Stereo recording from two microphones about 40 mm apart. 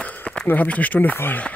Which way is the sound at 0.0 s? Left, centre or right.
Left.